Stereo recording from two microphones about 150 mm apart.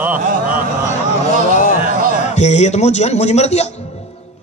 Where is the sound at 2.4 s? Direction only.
50° left (ahead or behind).